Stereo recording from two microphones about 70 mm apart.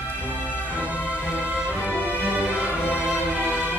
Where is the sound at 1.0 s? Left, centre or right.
Left.